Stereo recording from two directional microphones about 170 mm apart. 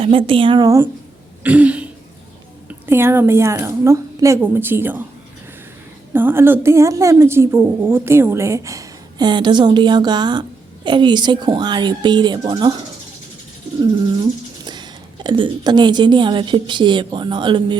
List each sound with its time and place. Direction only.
0.0 s a woman's voice: 30° right (ahead or behind)
1.5 s a woman's voice: 10° right (ahead or behind)
6.1 s a woman's voice: 15° right (ahead or behind)
13.7 s speech: 25° right (ahead or behind)